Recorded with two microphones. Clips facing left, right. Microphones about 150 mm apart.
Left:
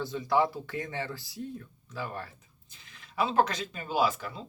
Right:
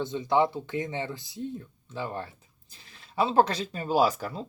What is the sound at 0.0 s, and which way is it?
Speech, 20° right (ahead or behind).